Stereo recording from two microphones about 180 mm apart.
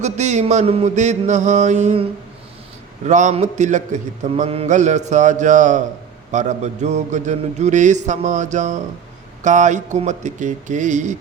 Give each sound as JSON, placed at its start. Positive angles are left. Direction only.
{"t": 0.0, "sound": "a man's voice", "side_deg": -40}
{"t": 3.1, "sound": "a man's voice", "side_deg": -40}